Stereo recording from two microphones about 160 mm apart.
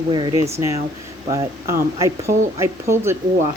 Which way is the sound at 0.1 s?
30° right (ahead or behind).